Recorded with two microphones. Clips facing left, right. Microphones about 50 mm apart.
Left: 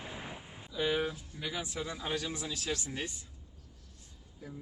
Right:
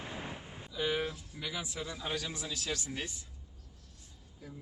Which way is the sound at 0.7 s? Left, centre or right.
Centre.